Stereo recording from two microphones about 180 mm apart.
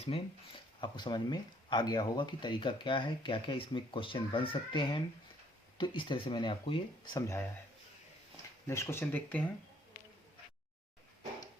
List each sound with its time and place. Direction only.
0.8 s speech: 25° left (ahead or behind)
8.6 s speech: 15° left (ahead or behind)